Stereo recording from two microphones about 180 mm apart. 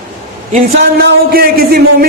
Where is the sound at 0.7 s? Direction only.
60° right (ahead or behind).